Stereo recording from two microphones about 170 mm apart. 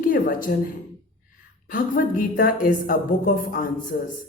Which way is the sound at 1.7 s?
55° left (ahead or behind).